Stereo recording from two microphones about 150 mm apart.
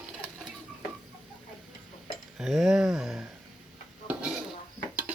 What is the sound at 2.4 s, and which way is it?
Speech, centre (ahead or behind).